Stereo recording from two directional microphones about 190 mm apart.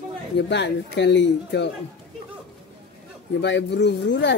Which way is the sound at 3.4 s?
65° left (ahead or behind).